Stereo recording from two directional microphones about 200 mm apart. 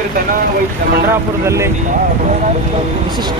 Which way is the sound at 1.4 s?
15° right (ahead or behind).